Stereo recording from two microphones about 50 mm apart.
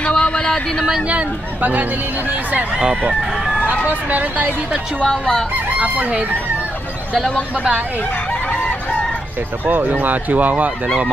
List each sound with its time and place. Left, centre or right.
0.0 s a sound: centre
1.0 s speech: right
3.2 s speech: centre
4.1 s speech: right
5.0 s crowing: centre
9.7 s speech: right